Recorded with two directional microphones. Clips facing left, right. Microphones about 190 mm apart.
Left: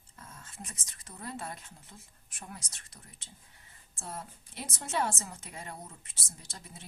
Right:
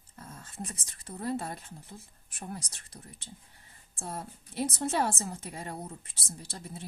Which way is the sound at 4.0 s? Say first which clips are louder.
Right 3 dB; 35° right (ahead or behind).